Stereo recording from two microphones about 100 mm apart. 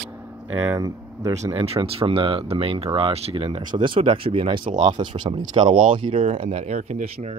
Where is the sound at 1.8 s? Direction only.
70° right (ahead or behind); by 3.6 s 90° right.